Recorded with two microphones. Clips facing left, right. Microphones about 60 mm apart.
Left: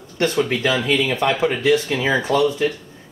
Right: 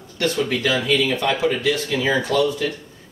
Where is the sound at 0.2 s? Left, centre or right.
Left.